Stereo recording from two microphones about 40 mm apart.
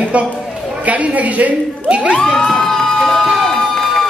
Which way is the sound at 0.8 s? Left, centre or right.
Right.